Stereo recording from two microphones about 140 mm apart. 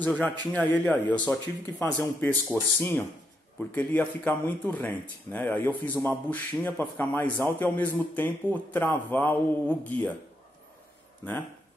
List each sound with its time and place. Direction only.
0.0 s a man's voice: 10° left (ahead or behind)
11.2 s speech: 20° left (ahead or behind)